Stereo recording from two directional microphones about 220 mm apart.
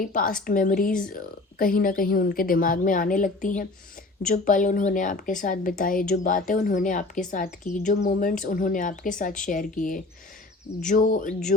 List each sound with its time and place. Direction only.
0.1 s speech: 40° left (ahead or behind)